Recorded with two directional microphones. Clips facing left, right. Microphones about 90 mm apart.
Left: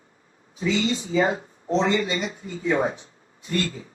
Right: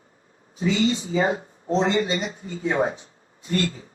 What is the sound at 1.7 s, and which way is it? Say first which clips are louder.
Speech: right 1 dB; 35° right (ahead or behind).